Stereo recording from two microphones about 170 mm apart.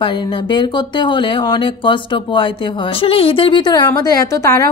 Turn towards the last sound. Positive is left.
turn(degrees=20)  # may be behind; listen again after turning